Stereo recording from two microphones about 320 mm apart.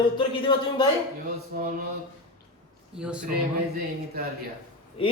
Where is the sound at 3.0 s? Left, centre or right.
Centre.